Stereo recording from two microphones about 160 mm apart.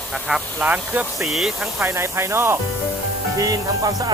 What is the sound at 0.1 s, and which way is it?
Speech, 5° right (ahead or behind).